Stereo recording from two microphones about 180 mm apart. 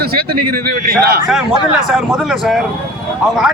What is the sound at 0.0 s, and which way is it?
A man's voice, 55° right (ahead or behind).